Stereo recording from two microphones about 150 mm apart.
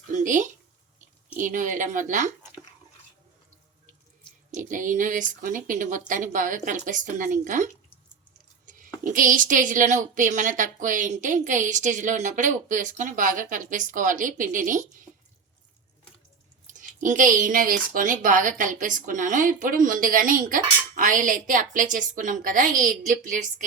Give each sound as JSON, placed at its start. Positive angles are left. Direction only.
{"t": 0.1, "sound": "a sound", "side_deg": -60}
{"t": 1.4, "sound": "speech", "side_deg": -60}
{"t": 4.5, "sound": "speech", "side_deg": -60}
{"t": 9.0, "sound": "speech", "side_deg": -65}
{"t": 16.6, "sound": "speech", "side_deg": -60}